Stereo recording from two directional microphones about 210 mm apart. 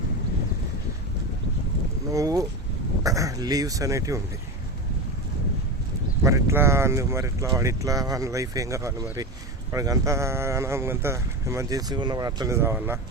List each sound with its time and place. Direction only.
2.1 s speech: 15° right (ahead or behind)
6.2 s speech: 15° right (ahead or behind)